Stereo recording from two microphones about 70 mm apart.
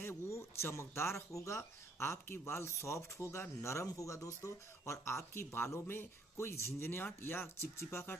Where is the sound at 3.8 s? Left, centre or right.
Left.